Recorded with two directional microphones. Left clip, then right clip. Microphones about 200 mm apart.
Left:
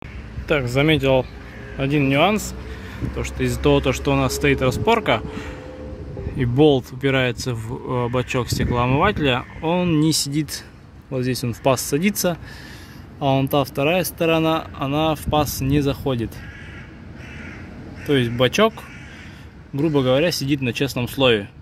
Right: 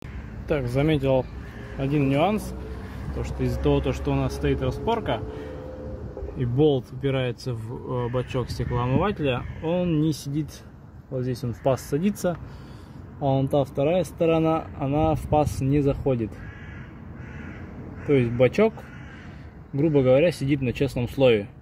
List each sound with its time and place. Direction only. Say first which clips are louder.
0.5 s speech: left 6 dB; 5° left (ahead or behind)
18.0 s speech: left 1 dB; centre (ahead or behind)
19.8 s speech: left 1 dB; 45° left (ahead or behind)